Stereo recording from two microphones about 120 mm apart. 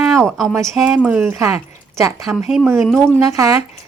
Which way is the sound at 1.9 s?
30° right (ahead or behind).